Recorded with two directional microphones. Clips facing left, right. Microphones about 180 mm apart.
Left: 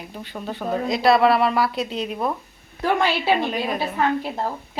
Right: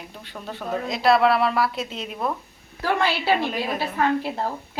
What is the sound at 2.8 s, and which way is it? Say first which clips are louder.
Speech: left 2 dB; 15° left (ahead or behind).